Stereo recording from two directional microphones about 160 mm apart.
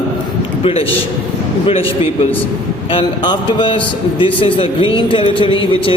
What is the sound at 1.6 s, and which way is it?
Speech, 35° left (ahead or behind).